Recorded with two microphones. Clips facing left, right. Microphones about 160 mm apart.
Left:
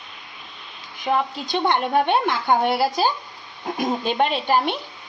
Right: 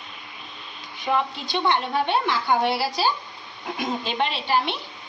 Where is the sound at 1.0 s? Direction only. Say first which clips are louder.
Left 2 dB; 45° left (ahead or behind).